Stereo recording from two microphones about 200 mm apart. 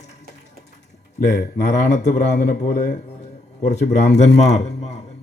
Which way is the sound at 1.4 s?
35° left (ahead or behind).